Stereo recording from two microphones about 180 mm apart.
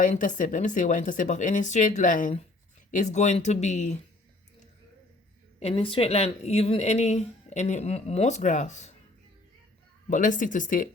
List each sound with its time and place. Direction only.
0.0 s speech: 45° left (ahead or behind)
5.5 s speech: 35° left (ahead or behind)
10.1 s speech: 45° left (ahead or behind)